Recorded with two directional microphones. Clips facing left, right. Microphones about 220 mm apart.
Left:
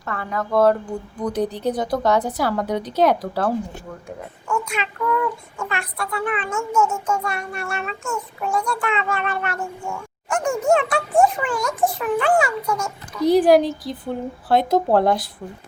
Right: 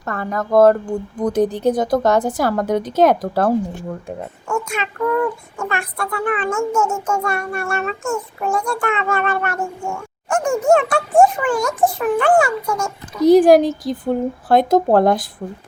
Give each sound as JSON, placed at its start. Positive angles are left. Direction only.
{"t": 0.0, "sound": "child singing", "side_deg": -45}